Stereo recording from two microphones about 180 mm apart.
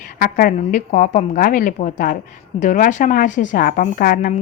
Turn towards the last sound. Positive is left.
turn(degrees=50)  # may be behind; listen again after turning